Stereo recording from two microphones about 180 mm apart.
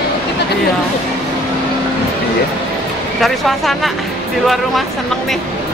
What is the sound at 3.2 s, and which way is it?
Speech, centre (ahead or behind).